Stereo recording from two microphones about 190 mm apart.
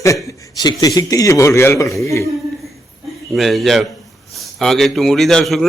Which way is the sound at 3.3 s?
Centre (ahead or behind).